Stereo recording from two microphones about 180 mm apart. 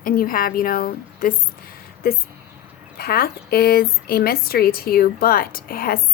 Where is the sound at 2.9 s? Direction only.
55° left (ahead or behind).